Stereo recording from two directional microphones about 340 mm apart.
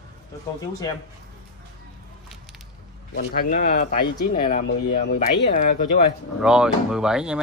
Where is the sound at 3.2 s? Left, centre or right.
Left.